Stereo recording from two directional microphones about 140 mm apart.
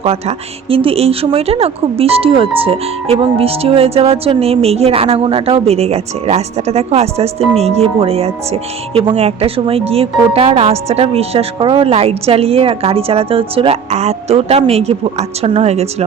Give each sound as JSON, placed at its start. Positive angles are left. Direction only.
{"t": 0.0, "sound": "speech", "side_deg": -45}